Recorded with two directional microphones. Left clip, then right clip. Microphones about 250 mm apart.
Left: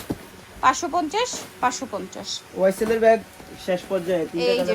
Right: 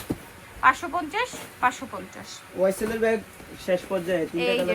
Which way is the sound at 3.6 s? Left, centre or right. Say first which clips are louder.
Left 1 dB; centre.